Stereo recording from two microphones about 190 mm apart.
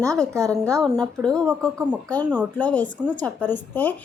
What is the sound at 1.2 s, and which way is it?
A woman's voice, 5° left (ahead or behind).